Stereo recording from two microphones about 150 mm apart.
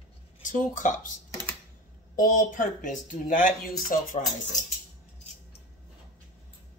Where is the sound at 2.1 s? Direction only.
65° left (ahead or behind).